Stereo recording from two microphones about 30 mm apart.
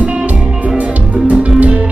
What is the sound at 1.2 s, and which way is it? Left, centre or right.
Music, right.